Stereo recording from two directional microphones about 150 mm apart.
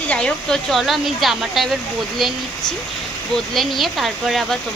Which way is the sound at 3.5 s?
Centre (ahead or behind).